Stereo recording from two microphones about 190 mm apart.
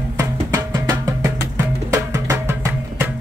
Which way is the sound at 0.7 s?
20° right (ahead or behind).